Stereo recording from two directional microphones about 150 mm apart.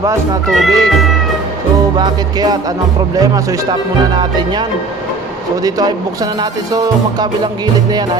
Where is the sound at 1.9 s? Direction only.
25° right (ahead or behind).